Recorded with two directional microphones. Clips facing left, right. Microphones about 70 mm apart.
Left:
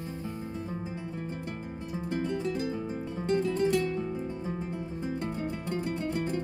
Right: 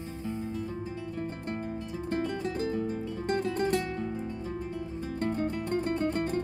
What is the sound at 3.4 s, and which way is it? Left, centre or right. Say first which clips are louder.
Music: left 2 dB; right.